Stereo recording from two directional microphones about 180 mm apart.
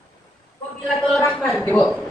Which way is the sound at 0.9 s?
Centre (ahead or behind).